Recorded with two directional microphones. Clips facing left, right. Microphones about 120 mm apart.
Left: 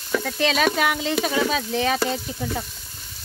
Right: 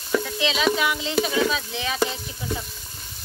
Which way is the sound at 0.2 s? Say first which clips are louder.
Left 2 dB; 50° left (ahead or behind).